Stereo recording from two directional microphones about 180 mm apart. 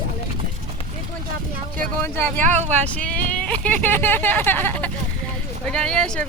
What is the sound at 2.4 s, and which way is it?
Speech, 40° right (ahead or behind).